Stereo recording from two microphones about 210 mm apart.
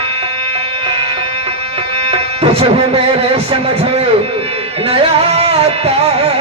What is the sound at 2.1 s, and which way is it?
Music, 30° right (ahead or behind).